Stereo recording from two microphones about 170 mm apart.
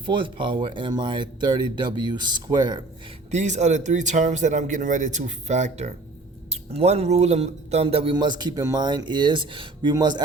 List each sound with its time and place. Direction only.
0.0 s a man's voice: 30° right (ahead or behind)
3.3 s a man's voice: 45° right (ahead or behind); by 10.2 s 25° right (ahead or behind)